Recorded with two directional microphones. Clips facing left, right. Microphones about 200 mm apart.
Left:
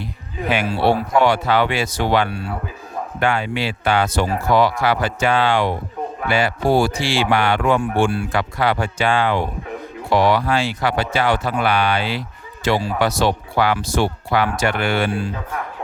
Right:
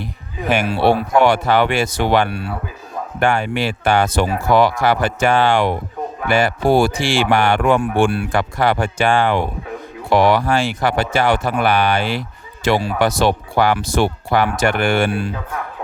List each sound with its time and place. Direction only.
0.7 s speech: 65° right (ahead or behind)
3.2 s speech: 45° right (ahead or behind)
12.6 s speech: 60° right (ahead or behind)